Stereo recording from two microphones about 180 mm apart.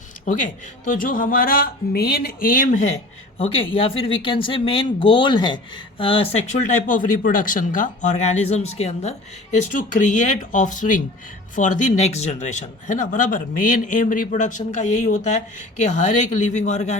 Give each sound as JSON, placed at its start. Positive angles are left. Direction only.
{"t": 0.3, "sound": "speech", "side_deg": 45}
{"t": 3.3, "sound": "speech", "side_deg": 30}
{"t": 16.4, "sound": "a man's voice", "side_deg": 40}